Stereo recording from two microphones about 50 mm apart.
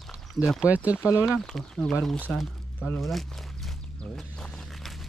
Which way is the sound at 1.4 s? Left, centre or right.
Centre.